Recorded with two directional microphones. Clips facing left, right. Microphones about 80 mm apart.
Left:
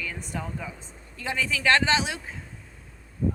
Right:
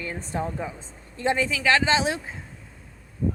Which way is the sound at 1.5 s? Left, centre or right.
Centre.